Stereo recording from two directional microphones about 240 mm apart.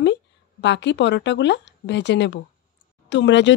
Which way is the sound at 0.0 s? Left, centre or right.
Left.